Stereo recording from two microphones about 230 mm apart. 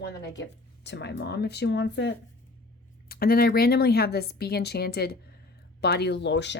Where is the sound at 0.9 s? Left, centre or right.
Left.